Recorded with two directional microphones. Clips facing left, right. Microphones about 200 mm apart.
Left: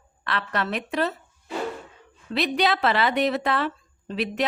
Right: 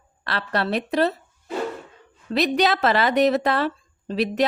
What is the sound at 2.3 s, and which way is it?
A woman's voice, 40° right (ahead or behind).